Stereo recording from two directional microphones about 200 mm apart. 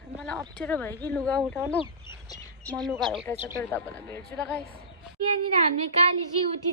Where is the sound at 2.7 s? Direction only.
Centre (ahead or behind).